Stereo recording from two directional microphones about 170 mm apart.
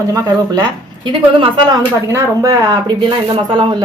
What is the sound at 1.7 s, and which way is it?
Speech, 20° right (ahead or behind).